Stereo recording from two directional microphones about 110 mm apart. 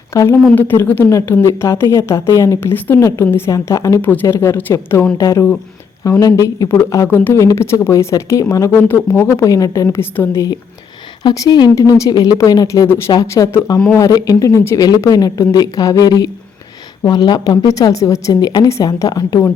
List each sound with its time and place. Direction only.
0.1 s speech: 25° left (ahead or behind)
2.7 s a woman's voice: 15° left (ahead or behind)
4.0 s speech: 20° left (ahead or behind)
11.2 s a woman's voice: 40° left (ahead or behind)